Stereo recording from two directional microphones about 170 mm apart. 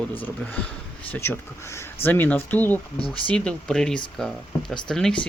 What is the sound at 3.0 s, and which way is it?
Speech, 30° left (ahead or behind).